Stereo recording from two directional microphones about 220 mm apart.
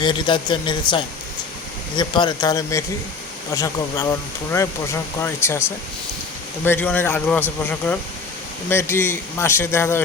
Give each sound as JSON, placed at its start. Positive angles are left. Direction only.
{"t": 0.0, "sound": "a man's voice", "side_deg": 20}
{"t": 5.2, "sound": "a man's voice", "side_deg": 10}